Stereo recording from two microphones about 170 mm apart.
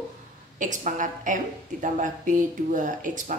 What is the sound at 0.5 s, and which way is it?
A woman's voice, 50° right (ahead or behind).